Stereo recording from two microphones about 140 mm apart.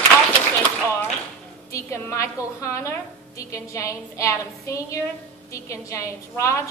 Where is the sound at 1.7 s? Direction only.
20° left (ahead or behind).